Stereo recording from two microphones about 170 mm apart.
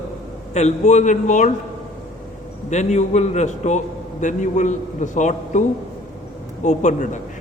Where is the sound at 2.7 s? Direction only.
45° left (ahead or behind).